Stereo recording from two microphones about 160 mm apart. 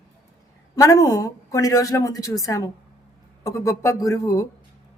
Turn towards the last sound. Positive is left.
turn(degrees=20)  # may be behind; listen again after turning